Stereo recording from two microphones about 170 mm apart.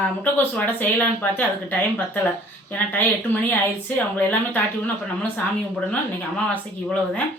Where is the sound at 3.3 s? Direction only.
10° left (ahead or behind).